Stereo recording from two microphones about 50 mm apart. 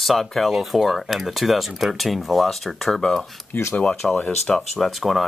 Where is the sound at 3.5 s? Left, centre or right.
Left.